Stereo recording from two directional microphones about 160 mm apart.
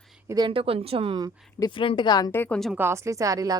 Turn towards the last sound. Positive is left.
turn(degrees=-20)  # may be behind; listen again after turning